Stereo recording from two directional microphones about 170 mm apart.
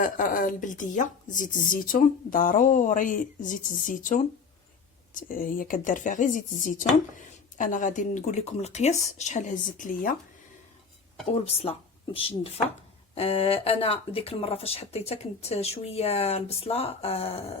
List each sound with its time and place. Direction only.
0.0 s a woman's voice: 55° left (ahead or behind)
11.4 s speech: 35° left (ahead or behind)